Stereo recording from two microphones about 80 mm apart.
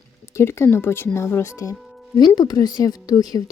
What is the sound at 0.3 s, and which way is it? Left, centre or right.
Speech, left.